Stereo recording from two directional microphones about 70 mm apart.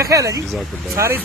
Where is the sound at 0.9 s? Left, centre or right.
Right.